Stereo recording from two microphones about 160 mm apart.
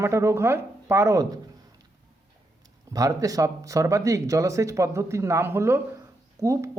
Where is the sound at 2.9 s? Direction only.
20° right (ahead or behind).